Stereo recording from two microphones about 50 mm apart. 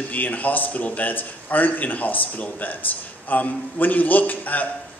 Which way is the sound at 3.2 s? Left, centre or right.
Left.